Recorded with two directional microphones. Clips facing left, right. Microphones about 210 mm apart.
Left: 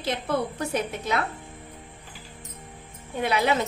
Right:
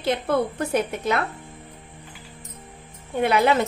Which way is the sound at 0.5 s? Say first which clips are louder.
Right 4 dB; 55° right (ahead or behind).